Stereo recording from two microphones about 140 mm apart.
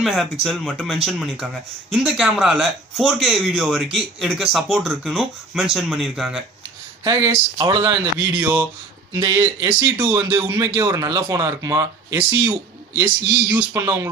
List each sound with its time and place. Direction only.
0.0 s speech: centre (ahead or behind)
7.1 s speech: 20° right (ahead or behind)
7.5 s speech: 35° right (ahead or behind)
8.3 s speech: 15° right (ahead or behind)
9.1 s speech: 25° right (ahead or behind)
9.9 s speech: 15° right (ahead or behind)